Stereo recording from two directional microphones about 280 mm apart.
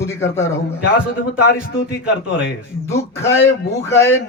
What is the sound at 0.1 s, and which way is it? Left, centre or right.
Speech, centre.